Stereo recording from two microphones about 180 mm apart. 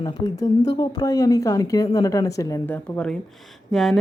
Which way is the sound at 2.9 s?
5° left (ahead or behind).